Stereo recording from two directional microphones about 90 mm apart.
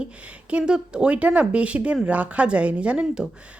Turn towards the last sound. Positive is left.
turn(degrees=-10)  # may be behind; listen again after turning